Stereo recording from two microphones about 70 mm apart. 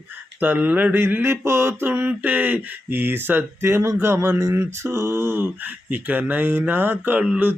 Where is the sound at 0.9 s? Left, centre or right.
Right.